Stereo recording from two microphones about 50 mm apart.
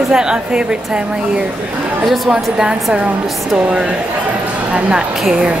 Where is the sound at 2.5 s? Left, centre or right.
Centre.